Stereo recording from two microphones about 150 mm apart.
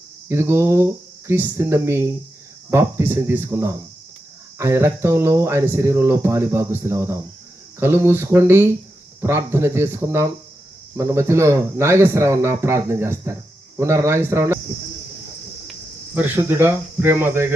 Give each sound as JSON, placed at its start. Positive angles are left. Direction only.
{"t": 0.3, "sound": "speech", "side_deg": -15}
{"t": 16.1, "sound": "speech", "side_deg": -10}